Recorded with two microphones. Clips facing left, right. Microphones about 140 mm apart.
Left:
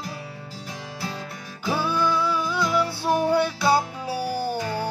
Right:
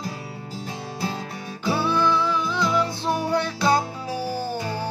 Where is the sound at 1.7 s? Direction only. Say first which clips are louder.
Right 2 dB; 10° left (ahead or behind).